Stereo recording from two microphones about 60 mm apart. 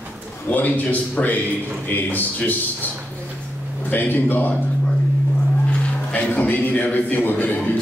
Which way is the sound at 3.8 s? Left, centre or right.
Left.